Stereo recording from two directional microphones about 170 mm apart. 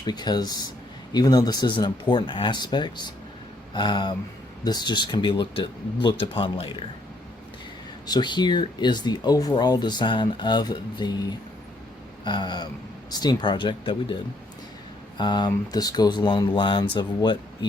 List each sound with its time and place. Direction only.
0.0 s speech: 25° left (ahead or behind)
8.0 s speech: 25° left (ahead or behind)
15.2 s speech: 25° left (ahead or behind)